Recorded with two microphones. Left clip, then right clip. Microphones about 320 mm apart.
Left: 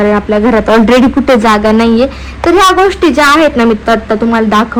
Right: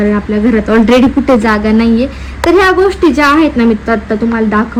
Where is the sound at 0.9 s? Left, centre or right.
Left.